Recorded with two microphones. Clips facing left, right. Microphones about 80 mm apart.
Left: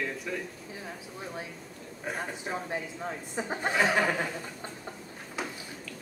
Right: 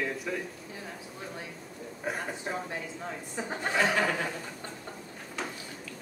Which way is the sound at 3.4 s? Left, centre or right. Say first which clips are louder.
Left 1 dB; centre.